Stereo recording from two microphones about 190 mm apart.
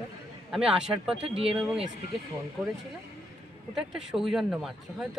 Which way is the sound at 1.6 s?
Centre (ahead or behind).